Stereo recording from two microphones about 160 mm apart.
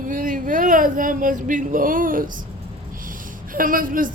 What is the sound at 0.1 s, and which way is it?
Speech, 55° right (ahead or behind).